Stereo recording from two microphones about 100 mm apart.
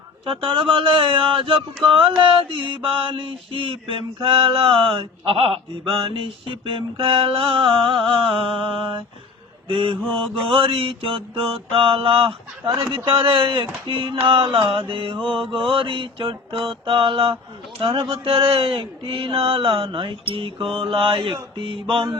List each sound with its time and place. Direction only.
0.3 s speech: 65° right (ahead or behind)